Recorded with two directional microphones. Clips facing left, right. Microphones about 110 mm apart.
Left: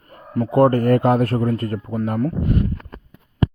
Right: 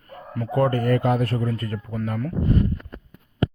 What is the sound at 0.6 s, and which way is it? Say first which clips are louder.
Speech: left 6 dB; 45° left (ahead or behind).